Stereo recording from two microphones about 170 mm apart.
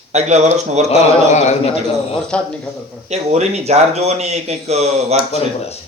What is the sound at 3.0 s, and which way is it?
A man's voice, 40° right (ahead or behind).